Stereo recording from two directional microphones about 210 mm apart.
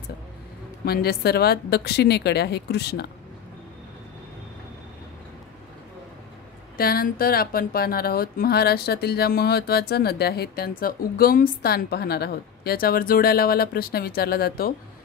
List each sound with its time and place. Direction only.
0.8 s speech: 50° left (ahead or behind)
6.8 s speech: 45° left (ahead or behind)